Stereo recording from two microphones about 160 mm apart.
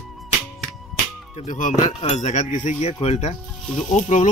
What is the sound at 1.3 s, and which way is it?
Speech, 50° left (ahead or behind).